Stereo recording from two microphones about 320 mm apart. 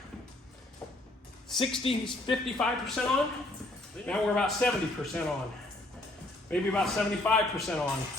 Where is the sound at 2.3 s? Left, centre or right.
Centre.